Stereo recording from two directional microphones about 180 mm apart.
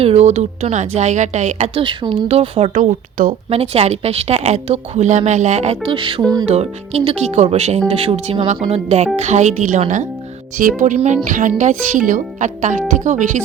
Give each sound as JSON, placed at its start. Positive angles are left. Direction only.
{"t": 0.0, "sound": "a woman's voice", "side_deg": -35}
{"t": 5.9, "sound": "music", "side_deg": -25}
{"t": 6.5, "sound": "a woman's voice", "side_deg": -35}